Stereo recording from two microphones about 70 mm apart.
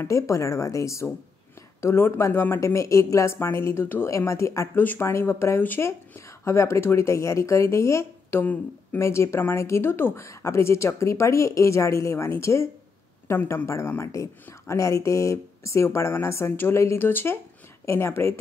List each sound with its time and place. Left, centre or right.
0.0 s speech: left
4.7 s speech: left
10.2 s speech: left